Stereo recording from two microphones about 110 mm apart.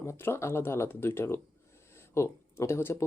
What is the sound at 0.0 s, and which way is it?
Speech, 20° left (ahead or behind).